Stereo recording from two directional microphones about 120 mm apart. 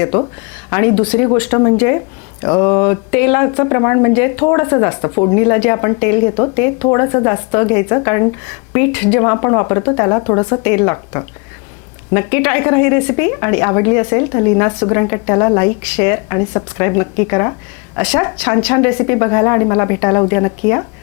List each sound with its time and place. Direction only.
0.0 s speech: 20° left (ahead or behind)